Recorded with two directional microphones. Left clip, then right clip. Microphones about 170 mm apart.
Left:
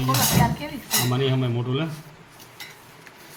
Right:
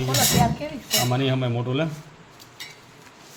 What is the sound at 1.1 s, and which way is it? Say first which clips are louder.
Speech: even; 60° right (ahead or behind).